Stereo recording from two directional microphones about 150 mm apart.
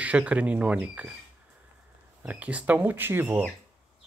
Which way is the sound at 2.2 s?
10° right (ahead or behind).